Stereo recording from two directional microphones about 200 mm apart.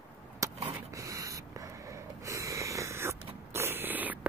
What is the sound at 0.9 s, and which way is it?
Snort, 15° right (ahead or behind).